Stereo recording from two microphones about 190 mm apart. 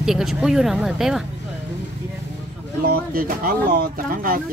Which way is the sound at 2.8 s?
50° right (ahead or behind).